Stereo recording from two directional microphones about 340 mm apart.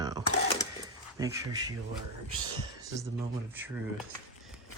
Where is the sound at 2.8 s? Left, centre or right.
Centre.